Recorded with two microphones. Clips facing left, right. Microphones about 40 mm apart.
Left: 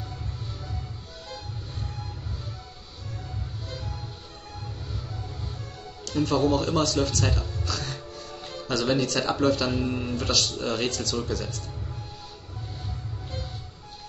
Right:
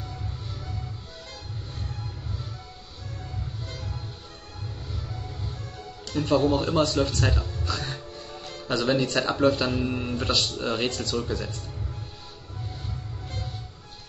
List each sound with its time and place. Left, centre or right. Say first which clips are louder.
4.9 s music: even; centre
6.2 s a man's voice: right 1 dB; centre
7.2 s speech: right 1 dB; centre
7.6 s music: right 1 dB; centre
8.6 s a man's voice: right 1 dB; centre
10.1 s a man's voice: even; centre